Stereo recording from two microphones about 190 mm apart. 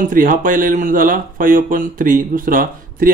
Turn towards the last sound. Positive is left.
turn(degrees=-50)  # may be behind; listen again after turning